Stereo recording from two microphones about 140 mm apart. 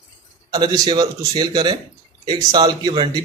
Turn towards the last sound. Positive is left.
turn(degrees=-30)  # may be behind; listen again after turning